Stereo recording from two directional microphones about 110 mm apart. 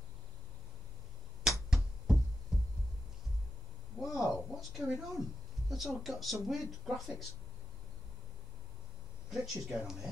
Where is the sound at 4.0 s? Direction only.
Centre (ahead or behind).